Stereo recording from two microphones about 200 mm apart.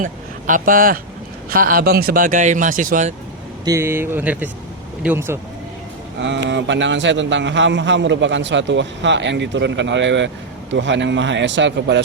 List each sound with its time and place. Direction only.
0.0 s speech: 40° right (ahead or behind)
3.6 s speech: 15° right (ahead or behind)
6.1 s a man's voice: 65° right (ahead or behind)